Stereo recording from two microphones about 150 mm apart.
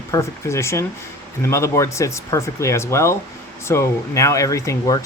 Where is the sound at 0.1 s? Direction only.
20° left (ahead or behind).